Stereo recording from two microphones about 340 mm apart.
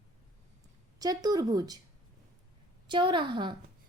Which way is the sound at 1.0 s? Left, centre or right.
Centre.